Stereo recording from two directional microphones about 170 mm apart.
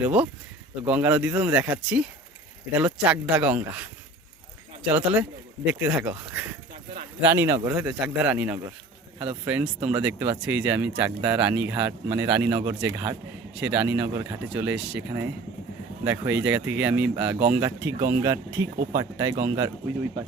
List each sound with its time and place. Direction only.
0.0 s speech: 10° right (ahead or behind)
4.9 s speech: 10° right (ahead or behind)
7.2 s speech: 15° right (ahead or behind)
7.9 s speech: 5° right (ahead or behind)